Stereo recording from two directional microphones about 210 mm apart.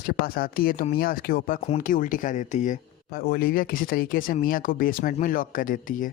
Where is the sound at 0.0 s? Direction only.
45° left (ahead or behind).